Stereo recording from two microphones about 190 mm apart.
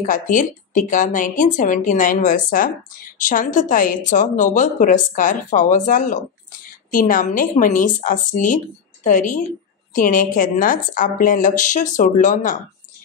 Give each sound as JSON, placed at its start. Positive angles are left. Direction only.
{"t": 0.0, "sound": "a woman's voice", "side_deg": 45}